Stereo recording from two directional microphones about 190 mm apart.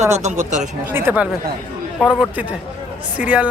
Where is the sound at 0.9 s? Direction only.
10° right (ahead or behind).